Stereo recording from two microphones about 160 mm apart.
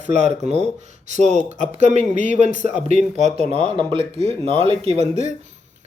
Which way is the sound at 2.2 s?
55° left (ahead or behind).